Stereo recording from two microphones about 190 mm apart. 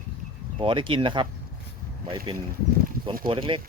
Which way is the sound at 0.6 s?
25° right (ahead or behind).